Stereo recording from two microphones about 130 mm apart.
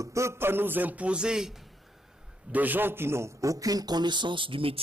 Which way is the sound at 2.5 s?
15° right (ahead or behind).